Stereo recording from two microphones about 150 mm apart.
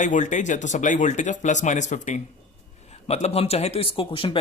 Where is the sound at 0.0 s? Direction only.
55° left (ahead or behind).